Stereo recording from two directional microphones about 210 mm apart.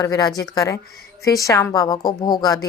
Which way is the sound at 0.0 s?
15° left (ahead or behind).